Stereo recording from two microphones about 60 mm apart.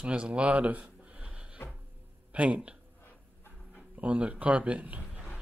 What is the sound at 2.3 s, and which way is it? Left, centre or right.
Speech, right.